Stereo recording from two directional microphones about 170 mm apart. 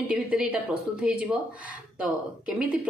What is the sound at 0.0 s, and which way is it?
Speech, 5° right (ahead or behind).